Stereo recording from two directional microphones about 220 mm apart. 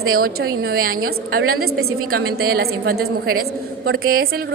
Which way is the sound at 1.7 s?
75° right (ahead or behind).